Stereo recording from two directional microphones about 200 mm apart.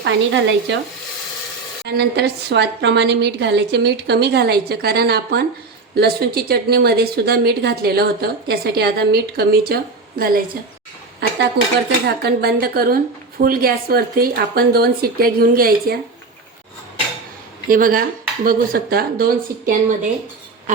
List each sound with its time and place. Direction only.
0.0 s a woman's voice: 65° right (ahead or behind)
2.0 s a woman's voice: 55° right (ahead or behind)
11.2 s dishes: 60° right (ahead or behind)
11.6 s a woman's voice: 55° right (ahead or behind)
17.7 s a woman's voice: 45° right (ahead or behind)